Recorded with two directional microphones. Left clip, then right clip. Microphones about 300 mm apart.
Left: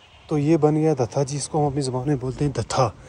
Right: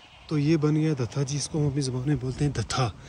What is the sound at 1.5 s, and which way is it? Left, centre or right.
Speech, left.